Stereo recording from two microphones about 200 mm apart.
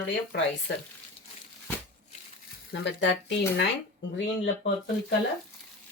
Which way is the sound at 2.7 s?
65° left (ahead or behind).